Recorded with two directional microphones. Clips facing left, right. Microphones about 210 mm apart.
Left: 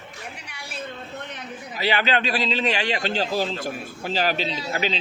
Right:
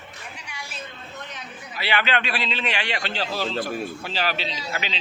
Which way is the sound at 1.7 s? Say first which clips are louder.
Left 2 dB; 40° left (ahead or behind).